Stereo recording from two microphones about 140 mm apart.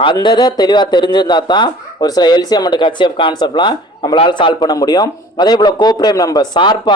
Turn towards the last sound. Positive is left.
turn(degrees=35)  # may be behind; listen again after turning